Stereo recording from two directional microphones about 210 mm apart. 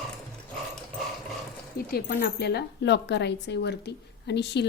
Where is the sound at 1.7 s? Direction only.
45° left (ahead or behind).